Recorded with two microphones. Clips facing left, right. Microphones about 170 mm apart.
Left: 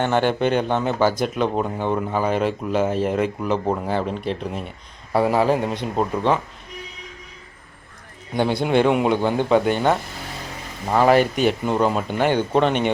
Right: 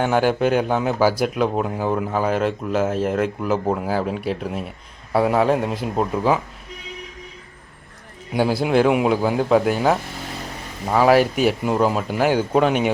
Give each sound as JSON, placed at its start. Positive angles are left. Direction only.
{"t": 0.0, "sound": "speech", "side_deg": -5}
{"t": 8.3, "sound": "speech", "side_deg": -5}